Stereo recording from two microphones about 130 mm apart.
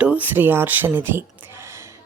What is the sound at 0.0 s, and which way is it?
Speech, 10° right (ahead or behind).